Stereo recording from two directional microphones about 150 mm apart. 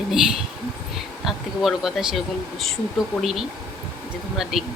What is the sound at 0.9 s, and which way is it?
Speech, centre (ahead or behind).